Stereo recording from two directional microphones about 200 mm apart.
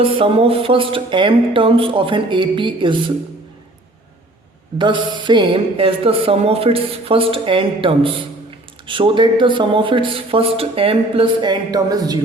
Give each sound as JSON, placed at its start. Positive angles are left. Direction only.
{"t": 0.0, "sound": "a woman's voice", "side_deg": -30}
{"t": 4.8, "sound": "a woman's voice", "side_deg": -25}